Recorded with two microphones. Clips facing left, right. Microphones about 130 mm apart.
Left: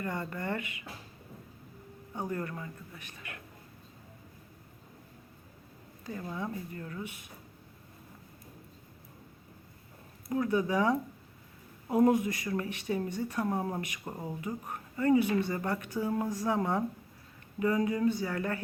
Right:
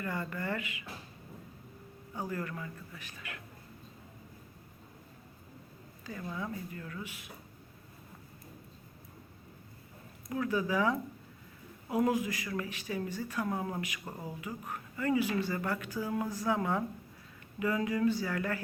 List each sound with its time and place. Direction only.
0.0 s speech: 25° left (ahead or behind)
2.1 s speech: 25° left (ahead or behind)
6.1 s speech: 25° left (ahead or behind)
10.2 s speech: 25° left (ahead or behind)